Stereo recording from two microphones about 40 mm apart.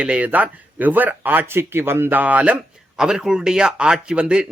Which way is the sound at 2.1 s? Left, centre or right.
Right.